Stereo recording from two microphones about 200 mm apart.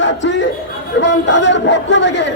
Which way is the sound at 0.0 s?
65° left (ahead or behind).